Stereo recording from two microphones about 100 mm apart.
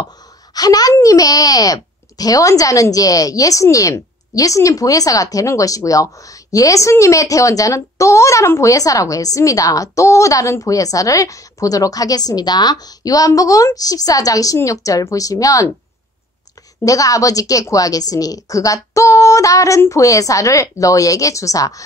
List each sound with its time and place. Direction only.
0.6 s a child's voice: 40° left (ahead or behind)
16.8 s a child's voice: 35° left (ahead or behind)